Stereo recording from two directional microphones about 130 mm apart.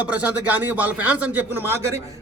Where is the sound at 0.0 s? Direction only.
10° right (ahead or behind).